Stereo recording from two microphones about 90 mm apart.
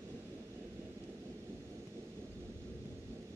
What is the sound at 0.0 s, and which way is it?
Thunder, 30° right (ahead or behind).